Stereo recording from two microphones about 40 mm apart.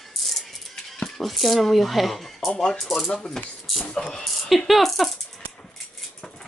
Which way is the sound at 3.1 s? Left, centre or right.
Left.